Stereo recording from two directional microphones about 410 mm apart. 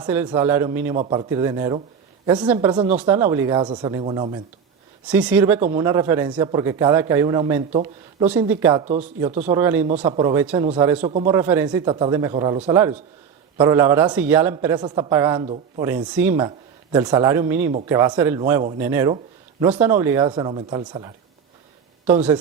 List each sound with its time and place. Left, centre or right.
0.0 s a man's voice: centre
8.3 s a man's voice: centre